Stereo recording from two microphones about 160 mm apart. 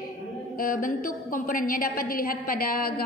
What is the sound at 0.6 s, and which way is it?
A woman's voice, 60° left (ahead or behind).